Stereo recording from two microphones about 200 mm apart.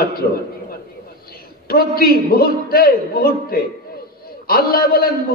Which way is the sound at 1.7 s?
50° left (ahead or behind).